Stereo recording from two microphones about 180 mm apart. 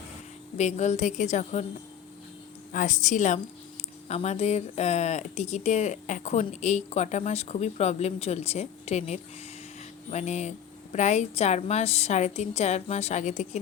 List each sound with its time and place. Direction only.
0.5 s a woman's voice: 40° left (ahead or behind)
2.7 s a woman's voice: 45° left (ahead or behind)